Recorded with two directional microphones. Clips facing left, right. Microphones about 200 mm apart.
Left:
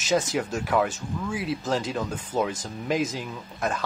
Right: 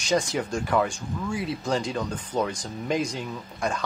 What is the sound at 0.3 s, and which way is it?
Speech, 5° left (ahead or behind).